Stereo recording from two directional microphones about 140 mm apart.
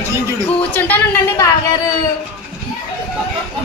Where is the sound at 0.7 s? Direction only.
15° left (ahead or behind).